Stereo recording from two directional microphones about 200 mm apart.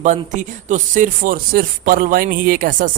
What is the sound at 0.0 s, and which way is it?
Speech, 35° right (ahead or behind).